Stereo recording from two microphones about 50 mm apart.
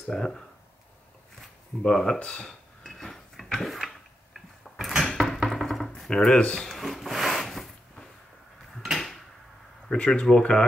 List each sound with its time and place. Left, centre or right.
0.0 s speech: centre
1.8 s speech: centre
2.4 s dishes: centre; by 6.7 s left
6.7 s wood: centre
9.8 s speech: left